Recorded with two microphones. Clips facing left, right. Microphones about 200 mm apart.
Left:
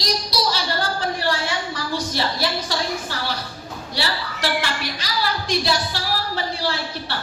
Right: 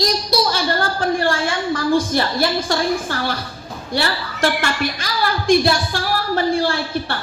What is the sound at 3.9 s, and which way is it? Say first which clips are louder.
A woman's voice: right 5 dB; 50° right (ahead or behind).